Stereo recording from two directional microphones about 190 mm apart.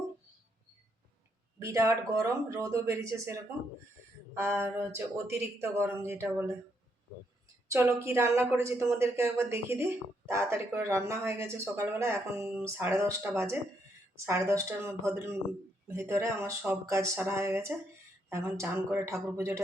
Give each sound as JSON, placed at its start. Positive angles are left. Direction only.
{"t": 1.6, "sound": "a woman's voice", "side_deg": -15}
{"t": 4.4, "sound": "a woman's voice", "side_deg": -10}
{"t": 7.7, "sound": "a woman's voice", "side_deg": -15}